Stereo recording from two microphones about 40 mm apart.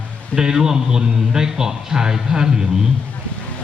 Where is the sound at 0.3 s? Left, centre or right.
Centre.